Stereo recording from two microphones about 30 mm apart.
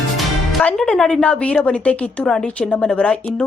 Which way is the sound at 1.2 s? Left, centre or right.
Left.